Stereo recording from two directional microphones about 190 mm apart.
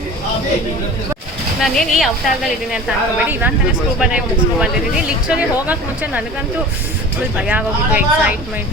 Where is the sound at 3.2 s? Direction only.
10° right (ahead or behind).